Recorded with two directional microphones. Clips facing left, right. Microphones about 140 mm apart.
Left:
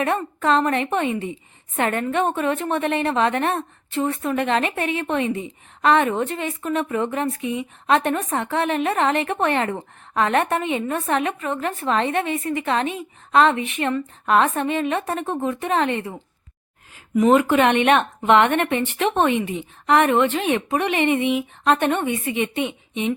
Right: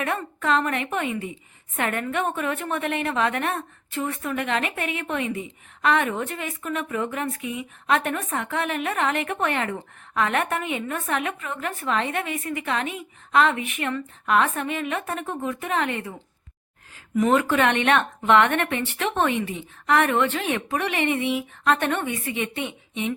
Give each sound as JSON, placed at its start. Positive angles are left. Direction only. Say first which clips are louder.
{"t": 0.0, "sound": "a woman's voice", "louder": "left 5 dB", "side_deg": 30}
{"t": 21.6, "sound": "speech", "louder": "left 3 dB", "side_deg": 30}
{"t": 21.8, "sound": "a woman's voice", "louder": "left 4 dB", "side_deg": 15}